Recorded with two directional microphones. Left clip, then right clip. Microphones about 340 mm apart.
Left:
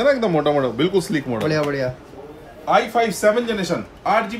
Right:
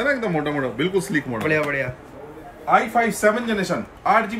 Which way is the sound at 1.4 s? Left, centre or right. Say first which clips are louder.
Left 1 dB; centre.